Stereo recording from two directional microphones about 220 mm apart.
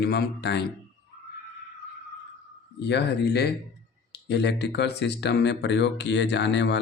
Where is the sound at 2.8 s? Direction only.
50° left (ahead or behind).